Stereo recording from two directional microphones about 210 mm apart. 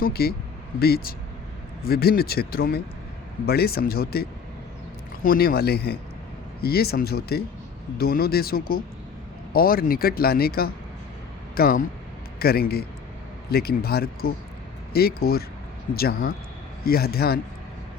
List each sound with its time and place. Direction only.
0.0 s speech: 45° left (ahead or behind)